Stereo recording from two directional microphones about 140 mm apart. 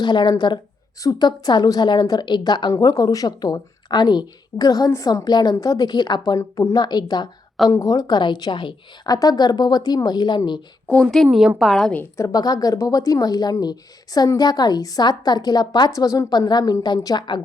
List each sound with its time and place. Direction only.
0.0 s a woman's voice: 30° left (ahead or behind)
10.8 s a woman's voice: 5° left (ahead or behind)
12.1 s a woman's voice: 25° left (ahead or behind)